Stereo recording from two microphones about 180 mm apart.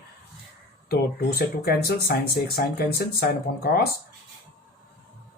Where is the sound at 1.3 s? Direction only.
60° left (ahead or behind).